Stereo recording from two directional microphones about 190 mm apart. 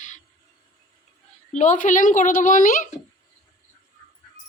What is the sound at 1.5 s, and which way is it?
A woman's voice, 40° left (ahead or behind).